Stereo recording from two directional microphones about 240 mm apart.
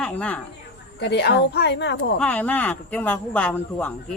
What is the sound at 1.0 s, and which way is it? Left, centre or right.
Speech, left.